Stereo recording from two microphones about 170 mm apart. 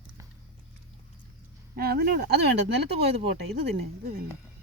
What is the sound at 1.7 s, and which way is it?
Speech, 65° right (ahead or behind).